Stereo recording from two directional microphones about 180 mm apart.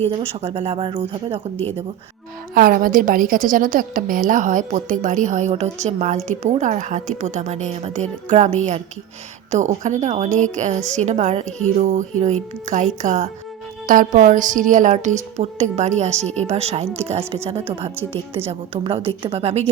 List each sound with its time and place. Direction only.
0.1 s speech: 30° right (ahead or behind)
2.6 s a woman's voice: 50° right (ahead or behind)
9.8 s a woman's voice: 40° right (ahead or behind)